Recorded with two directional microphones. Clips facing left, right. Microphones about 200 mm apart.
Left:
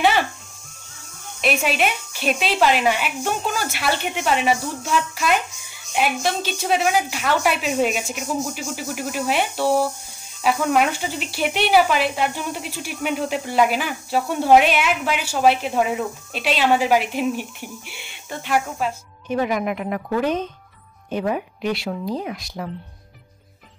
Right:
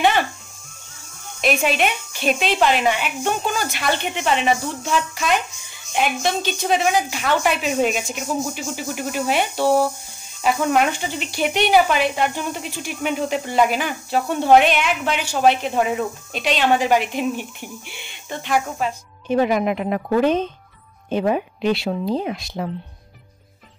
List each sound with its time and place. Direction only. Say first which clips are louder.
1.4 s speech: right 1 dB; 5° left (ahead or behind)
19.2 s speech: right 4 dB; 30° right (ahead or behind)